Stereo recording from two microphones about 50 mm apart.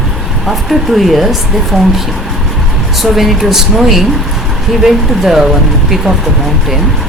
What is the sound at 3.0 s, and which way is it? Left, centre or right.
Speech, centre.